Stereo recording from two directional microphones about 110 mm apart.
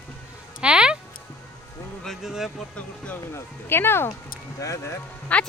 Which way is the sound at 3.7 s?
20° left (ahead or behind).